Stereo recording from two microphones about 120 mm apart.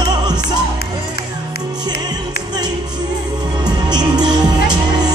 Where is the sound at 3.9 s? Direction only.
35° right (ahead or behind).